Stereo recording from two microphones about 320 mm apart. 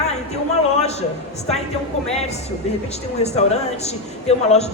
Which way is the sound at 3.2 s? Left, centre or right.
Centre.